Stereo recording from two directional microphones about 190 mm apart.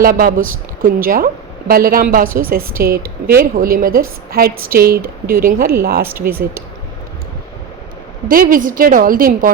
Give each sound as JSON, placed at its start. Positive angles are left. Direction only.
{"t": 0.0, "sound": "a woman's voice", "side_deg": -50}
{"t": 6.1, "sound": "speech", "side_deg": -10}
{"t": 8.3, "sound": "a woman's voice", "side_deg": -50}